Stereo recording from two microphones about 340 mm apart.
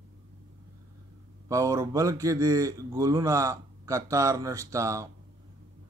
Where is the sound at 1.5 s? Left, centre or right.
Centre.